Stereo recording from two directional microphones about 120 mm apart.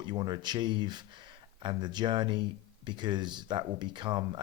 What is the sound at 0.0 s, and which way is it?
Speech, 40° right (ahead or behind).